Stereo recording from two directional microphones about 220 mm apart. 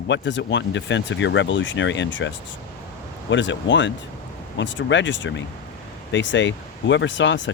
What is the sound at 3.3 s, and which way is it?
Speech, 55° left (ahead or behind).